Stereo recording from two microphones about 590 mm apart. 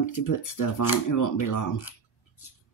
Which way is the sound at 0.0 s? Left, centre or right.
Left.